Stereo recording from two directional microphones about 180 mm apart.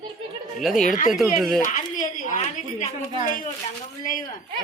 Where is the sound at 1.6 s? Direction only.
45° left (ahead or behind).